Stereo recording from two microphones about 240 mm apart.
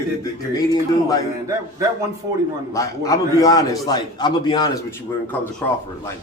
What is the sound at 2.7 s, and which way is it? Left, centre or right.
A man's voice, centre.